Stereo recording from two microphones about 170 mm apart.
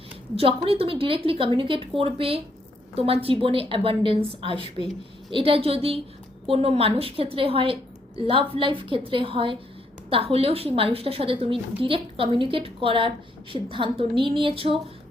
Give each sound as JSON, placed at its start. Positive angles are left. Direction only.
{"t": 0.3, "sound": "a woman's voice", "side_deg": -35}